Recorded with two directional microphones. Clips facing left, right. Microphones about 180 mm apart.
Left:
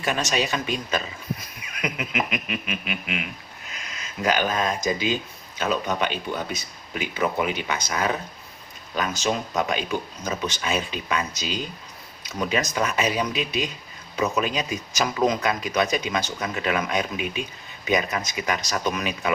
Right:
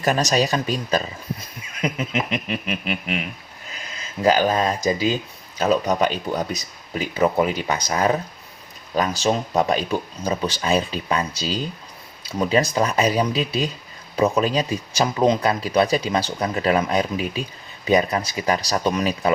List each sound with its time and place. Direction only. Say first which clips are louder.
0.0 s speech: right 5 dB; 40° right (ahead or behind)